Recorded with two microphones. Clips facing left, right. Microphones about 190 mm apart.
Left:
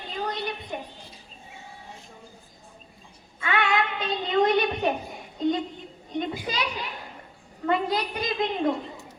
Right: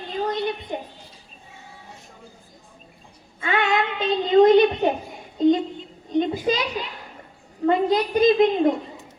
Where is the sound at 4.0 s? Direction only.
25° right (ahead or behind).